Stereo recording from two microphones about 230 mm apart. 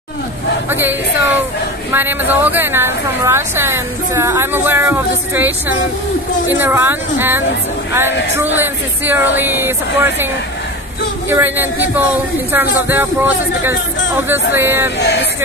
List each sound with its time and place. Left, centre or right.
0.7 s a woman's voice: centre
11.2 s a woman's voice: centre
15.0 s music: left